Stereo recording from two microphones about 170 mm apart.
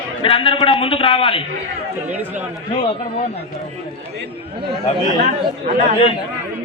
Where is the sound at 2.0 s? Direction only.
10° right (ahead or behind).